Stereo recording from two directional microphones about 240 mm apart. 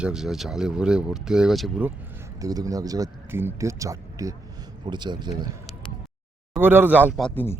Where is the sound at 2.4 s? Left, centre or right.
Centre.